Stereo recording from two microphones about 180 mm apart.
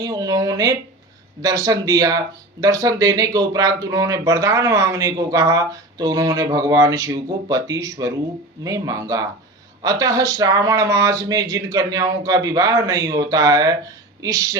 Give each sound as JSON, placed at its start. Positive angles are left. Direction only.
{"t": 0.0, "sound": "speech", "side_deg": -20}